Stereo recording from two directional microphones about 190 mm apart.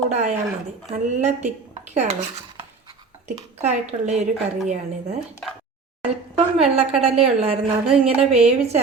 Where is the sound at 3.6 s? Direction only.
35° right (ahead or behind).